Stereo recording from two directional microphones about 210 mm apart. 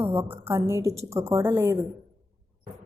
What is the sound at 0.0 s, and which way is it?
A woman's voice, 10° right (ahead or behind).